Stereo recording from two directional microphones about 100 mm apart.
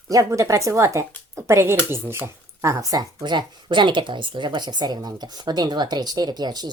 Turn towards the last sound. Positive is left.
turn(degrees=-45)  # may be behind; listen again after turning